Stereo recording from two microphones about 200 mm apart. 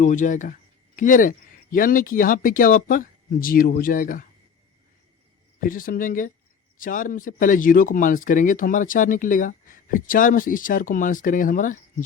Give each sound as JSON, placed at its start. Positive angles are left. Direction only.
{"t": 0.0, "sound": "speech", "side_deg": 40}
{"t": 5.5, "sound": "speech", "side_deg": 45}